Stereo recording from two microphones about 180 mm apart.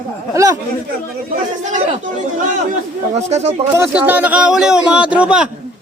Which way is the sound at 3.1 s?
35° right (ahead or behind).